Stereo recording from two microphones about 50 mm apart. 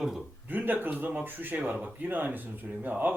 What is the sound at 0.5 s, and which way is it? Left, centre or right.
Speech, right.